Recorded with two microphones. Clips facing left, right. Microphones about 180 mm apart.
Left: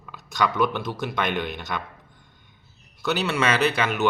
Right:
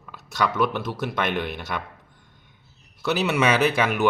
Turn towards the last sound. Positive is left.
turn(degrees=-10)  # may be behind; listen again after turning